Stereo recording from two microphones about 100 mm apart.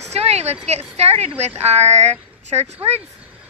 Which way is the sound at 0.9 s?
90° right.